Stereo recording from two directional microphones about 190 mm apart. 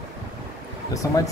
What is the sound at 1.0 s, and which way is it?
Speech, 15° left (ahead or behind).